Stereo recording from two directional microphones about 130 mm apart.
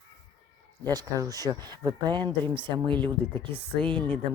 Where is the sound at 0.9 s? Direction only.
30° right (ahead or behind).